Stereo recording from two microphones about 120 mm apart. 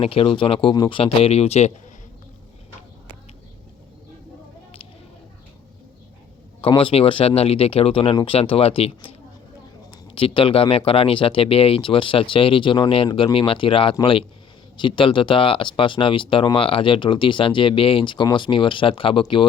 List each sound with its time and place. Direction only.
0.0 s speech: 50° left (ahead or behind)
6.6 s speech: 50° left (ahead or behind)